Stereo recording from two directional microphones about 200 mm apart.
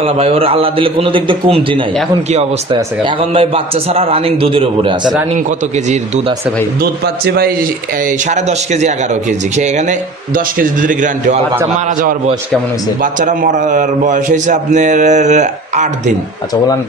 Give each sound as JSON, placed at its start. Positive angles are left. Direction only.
{"t": 0.0, "sound": "a man's voice", "side_deg": -30}
{"t": 6.8, "sound": "a man's voice", "side_deg": -50}
{"t": 8.3, "sound": "a man's voice", "side_deg": -35}
{"t": 13.0, "sound": "a man's voice", "side_deg": -40}